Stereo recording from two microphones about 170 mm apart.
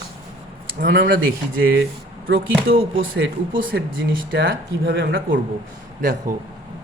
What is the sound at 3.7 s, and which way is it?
Speech, 75° right (ahead or behind).